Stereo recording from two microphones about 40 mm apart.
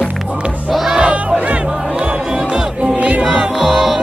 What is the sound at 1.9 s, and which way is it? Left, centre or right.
Music, right.